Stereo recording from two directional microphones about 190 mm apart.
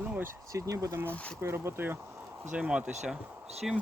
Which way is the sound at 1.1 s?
5° left (ahead or behind).